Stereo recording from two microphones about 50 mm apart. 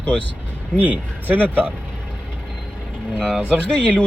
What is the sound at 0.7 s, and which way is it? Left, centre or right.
Speech, right.